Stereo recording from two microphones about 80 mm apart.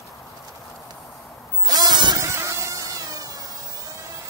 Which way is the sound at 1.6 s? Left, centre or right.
Right.